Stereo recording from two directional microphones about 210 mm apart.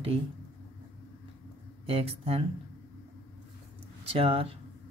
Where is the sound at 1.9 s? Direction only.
25° right (ahead or behind).